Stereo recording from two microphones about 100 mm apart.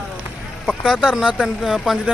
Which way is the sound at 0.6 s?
Centre (ahead or behind).